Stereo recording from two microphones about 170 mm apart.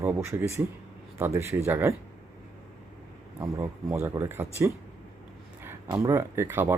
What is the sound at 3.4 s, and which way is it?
Speech, 15° right (ahead or behind).